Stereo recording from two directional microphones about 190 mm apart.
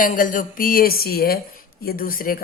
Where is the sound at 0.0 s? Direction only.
45° left (ahead or behind).